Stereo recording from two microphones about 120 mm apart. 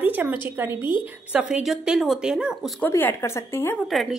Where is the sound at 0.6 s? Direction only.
15° right (ahead or behind).